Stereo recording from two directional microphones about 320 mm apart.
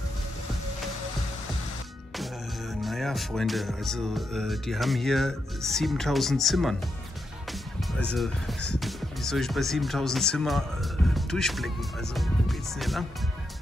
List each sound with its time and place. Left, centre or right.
2.7 s music: centre
8.0 s music: centre
8.7 s speech: centre